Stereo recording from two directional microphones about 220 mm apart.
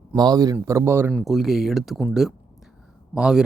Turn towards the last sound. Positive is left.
turn(degrees=-5)  # may be behind; listen again after turning